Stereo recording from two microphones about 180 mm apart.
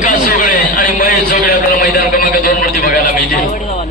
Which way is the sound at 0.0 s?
45° left (ahead or behind).